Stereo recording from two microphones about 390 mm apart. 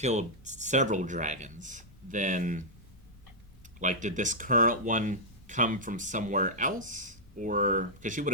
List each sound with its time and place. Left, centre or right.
0.0 s speech: centre
3.8 s speech: centre